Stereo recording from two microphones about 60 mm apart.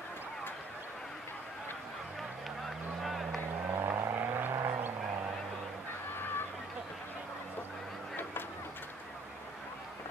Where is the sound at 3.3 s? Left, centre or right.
Right.